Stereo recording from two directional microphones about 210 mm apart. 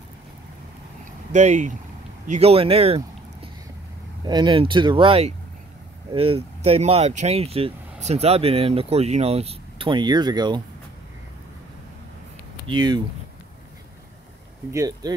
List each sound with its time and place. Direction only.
1.3 s speech: 35° right (ahead or behind)
4.2 s speech: 20° right (ahead or behind)
12.6 s speech: 20° right (ahead or behind)
14.7 s speech: 15° right (ahead or behind)